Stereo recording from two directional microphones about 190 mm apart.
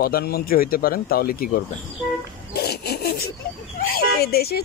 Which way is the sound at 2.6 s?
55° left (ahead or behind).